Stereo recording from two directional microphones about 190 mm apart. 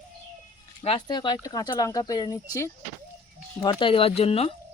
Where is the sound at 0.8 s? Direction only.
25° left (ahead or behind).